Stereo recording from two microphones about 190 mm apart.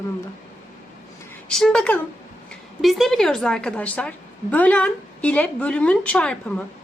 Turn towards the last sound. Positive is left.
turn(degrees=5)  # may be behind; listen again after turning